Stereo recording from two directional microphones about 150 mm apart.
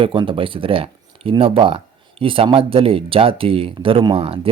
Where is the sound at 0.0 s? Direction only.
35° right (ahead or behind).